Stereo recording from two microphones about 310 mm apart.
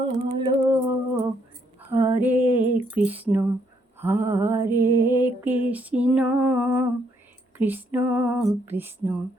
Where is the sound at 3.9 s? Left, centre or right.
Centre.